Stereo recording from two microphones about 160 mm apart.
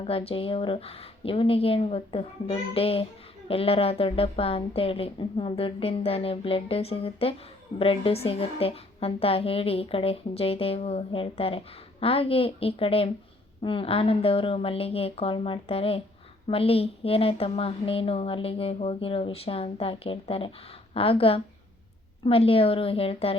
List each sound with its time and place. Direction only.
0.0 s a woman's voice: 35° left (ahead or behind)